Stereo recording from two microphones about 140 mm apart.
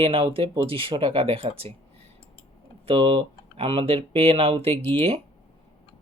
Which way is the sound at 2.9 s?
40° right (ahead or behind).